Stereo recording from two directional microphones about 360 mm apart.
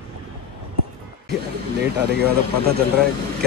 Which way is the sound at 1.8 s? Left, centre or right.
Right.